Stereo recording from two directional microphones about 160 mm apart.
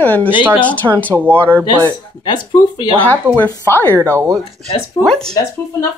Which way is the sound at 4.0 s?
20° right (ahead or behind).